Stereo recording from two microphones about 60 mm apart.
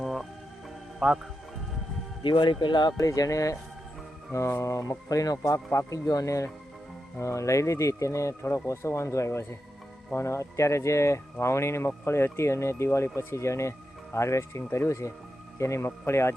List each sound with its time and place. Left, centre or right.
0.0 s music: centre
0.9 s speech: centre
3.0 s speech: left
4.3 s speech: left
5.7 s speech: left